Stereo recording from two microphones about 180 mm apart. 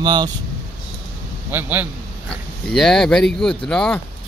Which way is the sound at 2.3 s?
5° left (ahead or behind).